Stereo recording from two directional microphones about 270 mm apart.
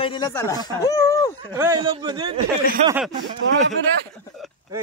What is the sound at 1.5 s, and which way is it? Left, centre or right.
Speech, centre.